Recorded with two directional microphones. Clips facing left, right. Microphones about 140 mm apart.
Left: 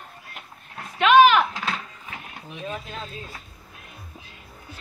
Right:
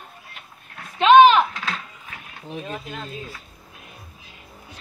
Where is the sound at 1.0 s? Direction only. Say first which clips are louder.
Right 3 dB; 25° right (ahead or behind).